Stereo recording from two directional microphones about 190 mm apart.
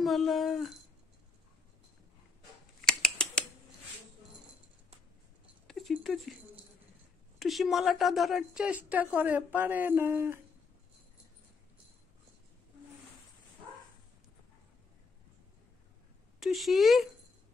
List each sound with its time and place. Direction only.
0.0 s speech: centre (ahead or behind)
2.8 s scissors: 5° left (ahead or behind)
5.7 s speech: centre (ahead or behind)
7.3 s a woman's voice: centre (ahead or behind)
16.3 s speech: centre (ahead or behind)